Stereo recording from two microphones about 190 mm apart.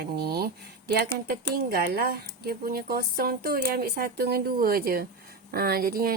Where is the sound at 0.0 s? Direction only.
55° right (ahead or behind).